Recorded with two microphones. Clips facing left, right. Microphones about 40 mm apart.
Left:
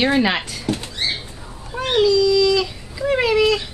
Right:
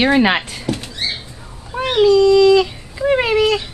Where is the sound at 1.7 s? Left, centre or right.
Centre.